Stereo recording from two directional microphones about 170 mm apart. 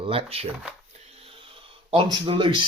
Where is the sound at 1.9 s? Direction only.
30° right (ahead or behind).